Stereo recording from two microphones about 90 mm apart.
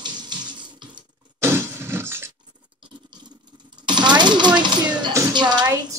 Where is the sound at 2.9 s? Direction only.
55° right (ahead or behind).